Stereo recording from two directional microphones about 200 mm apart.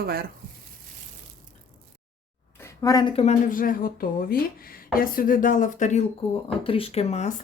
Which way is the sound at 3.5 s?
45° left (ahead or behind).